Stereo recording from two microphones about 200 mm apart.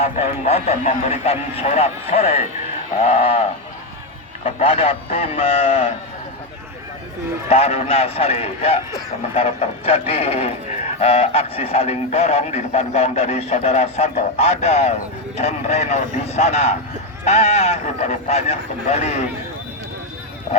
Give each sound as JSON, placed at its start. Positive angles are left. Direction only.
{"t": 0.0, "sound": "speech", "side_deg": 35}
{"t": 4.4, "sound": "speech", "side_deg": 30}
{"t": 7.5, "sound": "speech", "side_deg": 30}